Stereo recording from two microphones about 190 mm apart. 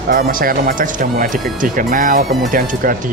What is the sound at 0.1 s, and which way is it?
Speech, 50° right (ahead or behind).